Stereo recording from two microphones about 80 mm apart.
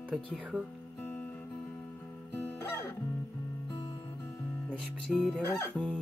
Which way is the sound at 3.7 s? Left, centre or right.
Left.